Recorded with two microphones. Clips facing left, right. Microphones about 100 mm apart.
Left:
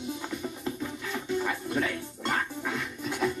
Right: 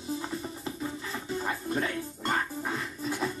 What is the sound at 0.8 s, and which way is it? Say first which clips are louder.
Music: left 1 dB; 35° right (ahead or behind).